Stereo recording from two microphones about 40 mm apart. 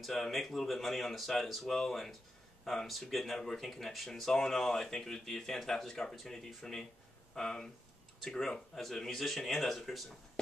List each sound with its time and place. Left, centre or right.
0.0 s speech: centre
3.3 s speech: centre
4.1 s speech: centre